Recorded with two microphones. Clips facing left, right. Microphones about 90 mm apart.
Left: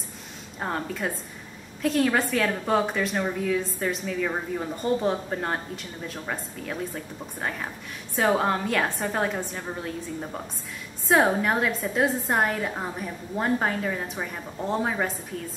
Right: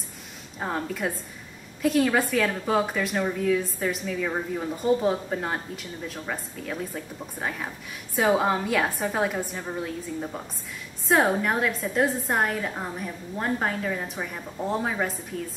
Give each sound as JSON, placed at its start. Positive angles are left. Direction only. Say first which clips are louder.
{"t": 0.6, "sound": "a woman's voice", "louder": "even", "side_deg": 0}